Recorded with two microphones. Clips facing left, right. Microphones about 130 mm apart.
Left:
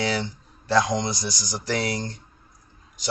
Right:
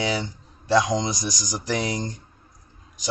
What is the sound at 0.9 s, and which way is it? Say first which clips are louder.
Speech: right 1 dB; 15° right (ahead or behind).